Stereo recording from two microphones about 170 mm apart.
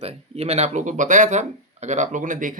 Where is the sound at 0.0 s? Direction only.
35° right (ahead or behind).